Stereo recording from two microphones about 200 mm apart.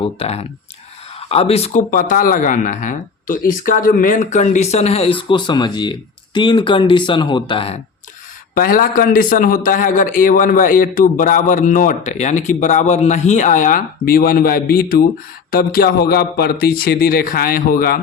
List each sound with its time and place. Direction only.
0.2 s speech: 30° left (ahead or behind)
8.5 s a man's voice: 45° left (ahead or behind)